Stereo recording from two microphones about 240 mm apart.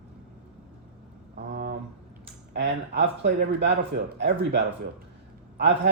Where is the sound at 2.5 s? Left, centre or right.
Right.